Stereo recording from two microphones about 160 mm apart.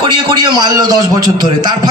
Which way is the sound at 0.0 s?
30° right (ahead or behind).